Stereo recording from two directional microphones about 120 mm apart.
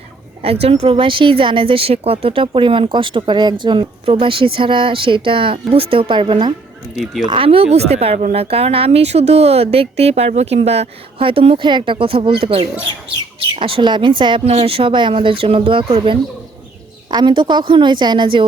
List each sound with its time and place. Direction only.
0.4 s speech: 55° right (ahead or behind)
6.9 s speech: centre (ahead or behind)
7.3 s a woman's voice: 50° right (ahead or behind)